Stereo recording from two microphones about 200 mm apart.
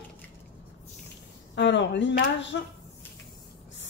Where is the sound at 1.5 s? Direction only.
65° left (ahead or behind).